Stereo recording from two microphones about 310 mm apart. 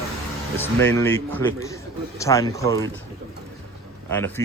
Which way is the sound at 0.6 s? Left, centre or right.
Centre.